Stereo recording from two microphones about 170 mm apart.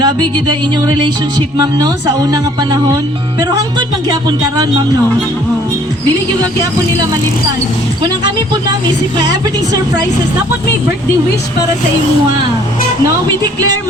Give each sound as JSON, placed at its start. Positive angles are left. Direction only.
{"t": 0.0, "sound": "speech", "side_deg": -25}
{"t": 1.8, "sound": "speech", "side_deg": -20}